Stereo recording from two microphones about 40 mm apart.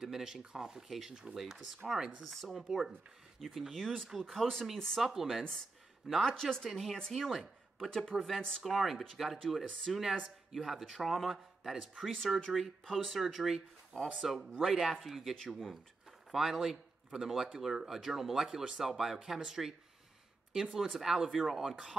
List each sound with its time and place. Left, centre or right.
0.0 s a man's voice: centre
2.0 s speech: centre
3.3 s a man's voice: centre
5.0 s speech: centre
6.2 s speech: centre
8.6 s a man's voice: centre
13.2 s a man's voice: centre
16.3 s a man's voice: centre
20.7 s speech: centre